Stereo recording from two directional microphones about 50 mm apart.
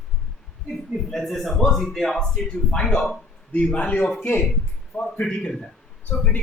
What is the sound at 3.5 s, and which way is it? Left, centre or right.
Speech, left.